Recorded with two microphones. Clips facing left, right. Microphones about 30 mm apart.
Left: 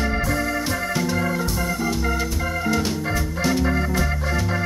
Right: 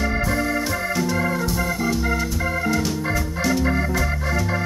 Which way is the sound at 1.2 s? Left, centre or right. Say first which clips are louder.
Right 1 dB; centre.